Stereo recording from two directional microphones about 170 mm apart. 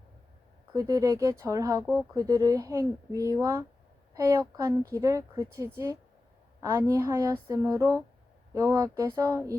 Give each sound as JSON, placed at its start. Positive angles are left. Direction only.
{"t": 0.7, "sound": "a woman's voice", "side_deg": -20}